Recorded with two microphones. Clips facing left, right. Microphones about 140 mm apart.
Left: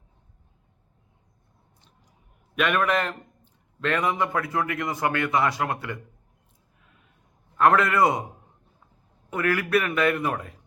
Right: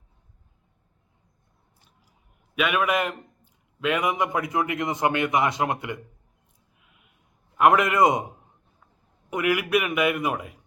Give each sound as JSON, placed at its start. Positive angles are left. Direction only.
{"t": 2.6, "sound": "a man's voice", "side_deg": -5}
{"t": 6.8, "sound": "a sound", "side_deg": -15}
{"t": 7.5, "sound": "a man's voice", "side_deg": -15}
{"t": 9.3, "sound": "a man's voice", "side_deg": -15}